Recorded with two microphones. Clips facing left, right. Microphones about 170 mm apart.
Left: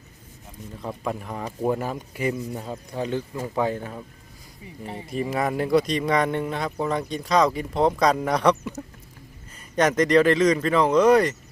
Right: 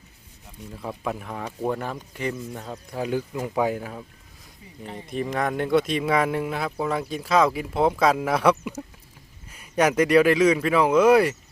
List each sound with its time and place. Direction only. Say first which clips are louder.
0.8 s speech: left 1 dB; centre (ahead or behind)
3.0 s speech: right 1 dB; 10° right (ahead or behind)
5.0 s speech: left 1 dB; 5° left (ahead or behind)